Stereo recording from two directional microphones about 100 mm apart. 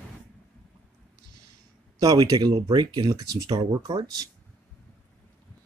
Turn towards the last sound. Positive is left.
turn(degrees=-40)  # may be behind; listen again after turning